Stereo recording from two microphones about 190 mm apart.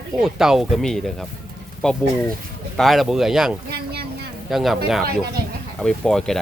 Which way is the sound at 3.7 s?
55° right (ahead or behind).